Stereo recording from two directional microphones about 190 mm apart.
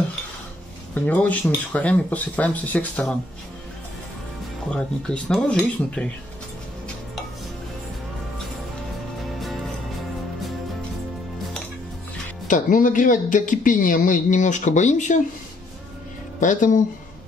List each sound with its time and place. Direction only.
0.9 s speech: 10° left (ahead or behind)
4.6 s speech: 5° left (ahead or behind)
12.4 s speech: 45° left (ahead or behind)
16.3 s speech: 40° left (ahead or behind)